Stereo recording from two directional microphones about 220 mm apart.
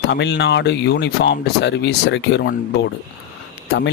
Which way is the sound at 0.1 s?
50° left (ahead or behind).